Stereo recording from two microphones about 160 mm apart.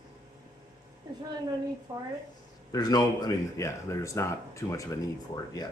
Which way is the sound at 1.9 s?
20° right (ahead or behind).